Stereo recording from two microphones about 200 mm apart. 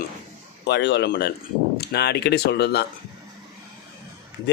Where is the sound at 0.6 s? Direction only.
60° left (ahead or behind).